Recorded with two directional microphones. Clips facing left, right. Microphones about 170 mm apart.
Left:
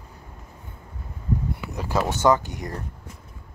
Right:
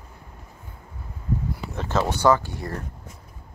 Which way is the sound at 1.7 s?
10° left (ahead or behind).